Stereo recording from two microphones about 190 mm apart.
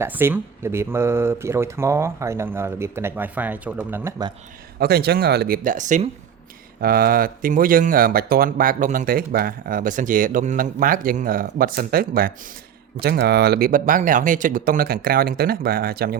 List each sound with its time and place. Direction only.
0.0 s speech: 10° right (ahead or behind)
4.8 s speech: 55° right (ahead or behind)